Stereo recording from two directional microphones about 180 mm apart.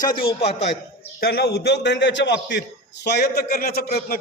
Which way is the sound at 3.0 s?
65° left (ahead or behind).